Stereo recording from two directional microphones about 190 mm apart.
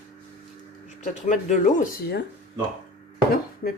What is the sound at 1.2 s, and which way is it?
Speech, 40° left (ahead or behind).